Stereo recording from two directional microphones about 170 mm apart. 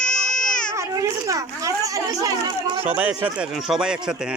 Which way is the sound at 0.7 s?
20° right (ahead or behind).